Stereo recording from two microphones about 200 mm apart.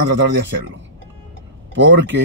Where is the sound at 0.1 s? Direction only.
65° right (ahead or behind).